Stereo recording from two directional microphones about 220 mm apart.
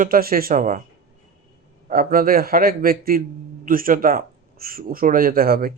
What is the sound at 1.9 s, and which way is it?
Speech, 40° right (ahead or behind).